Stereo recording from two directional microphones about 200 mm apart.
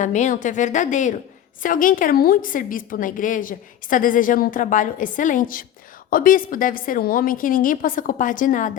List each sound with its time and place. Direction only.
0.0 s a woman's voice: 40° left (ahead or behind)